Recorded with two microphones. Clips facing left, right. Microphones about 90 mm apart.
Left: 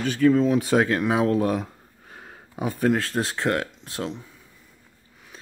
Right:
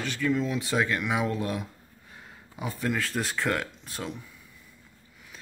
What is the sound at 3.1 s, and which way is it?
Speech, 30° left (ahead or behind).